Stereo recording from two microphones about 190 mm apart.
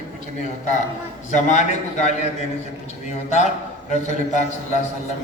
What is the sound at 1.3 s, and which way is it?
Speech, 40° left (ahead or behind).